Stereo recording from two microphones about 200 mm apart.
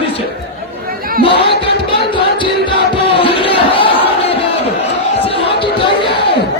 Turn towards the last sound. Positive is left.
turn(degrees=25)  # may be behind; listen again after turning